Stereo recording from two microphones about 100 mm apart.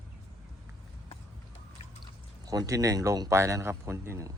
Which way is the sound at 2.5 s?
35° right (ahead or behind).